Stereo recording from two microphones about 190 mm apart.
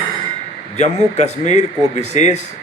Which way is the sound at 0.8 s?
35° left (ahead or behind).